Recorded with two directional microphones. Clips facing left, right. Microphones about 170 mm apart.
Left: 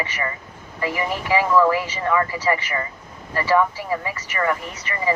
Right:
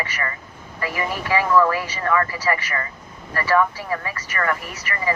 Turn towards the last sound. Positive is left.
turn(degrees=20)  # may be behind; listen again after turning